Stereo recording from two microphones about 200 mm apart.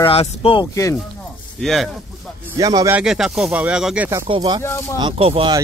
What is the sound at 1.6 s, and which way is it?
Speech, centre (ahead or behind).